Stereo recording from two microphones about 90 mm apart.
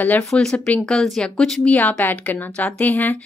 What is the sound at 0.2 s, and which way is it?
Speech, 5° left (ahead or behind).